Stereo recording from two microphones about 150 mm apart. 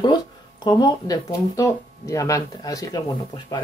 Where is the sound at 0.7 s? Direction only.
25° left (ahead or behind).